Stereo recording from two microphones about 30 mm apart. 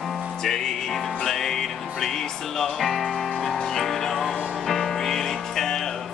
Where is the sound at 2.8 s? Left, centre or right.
Centre.